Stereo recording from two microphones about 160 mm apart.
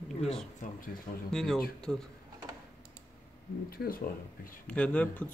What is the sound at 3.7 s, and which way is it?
Speech, 65° left (ahead or behind).